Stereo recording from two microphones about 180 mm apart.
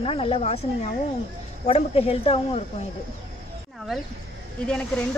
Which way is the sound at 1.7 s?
35° left (ahead or behind).